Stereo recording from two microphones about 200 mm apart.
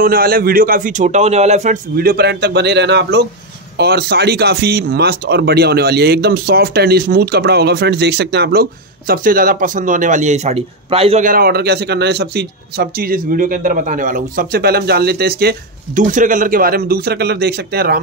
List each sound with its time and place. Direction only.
0.0 s speech: 50° right (ahead or behind)